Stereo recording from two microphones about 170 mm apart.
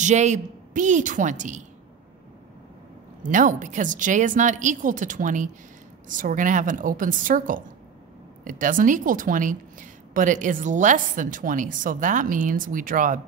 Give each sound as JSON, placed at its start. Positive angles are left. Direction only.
{"t": 0.0, "sound": "a woman's voice", "side_deg": -45}
{"t": 3.3, "sound": "a woman's voice", "side_deg": -50}